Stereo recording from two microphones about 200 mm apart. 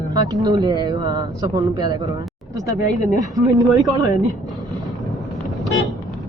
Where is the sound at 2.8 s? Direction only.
40° left (ahead or behind).